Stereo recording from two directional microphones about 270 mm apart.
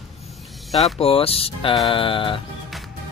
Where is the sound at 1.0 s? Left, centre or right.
Left.